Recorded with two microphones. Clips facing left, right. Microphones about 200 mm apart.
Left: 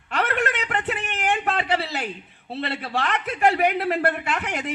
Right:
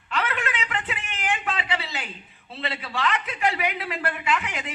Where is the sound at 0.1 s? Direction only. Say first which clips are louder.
Left 4 dB; 60° left (ahead or behind).